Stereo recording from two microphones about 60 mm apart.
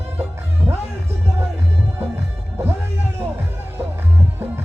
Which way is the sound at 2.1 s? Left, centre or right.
Right.